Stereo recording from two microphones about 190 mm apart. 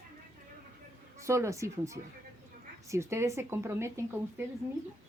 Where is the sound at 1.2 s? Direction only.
15° right (ahead or behind).